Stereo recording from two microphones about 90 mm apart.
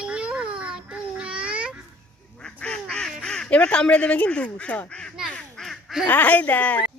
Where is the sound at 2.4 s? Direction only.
10° left (ahead or behind).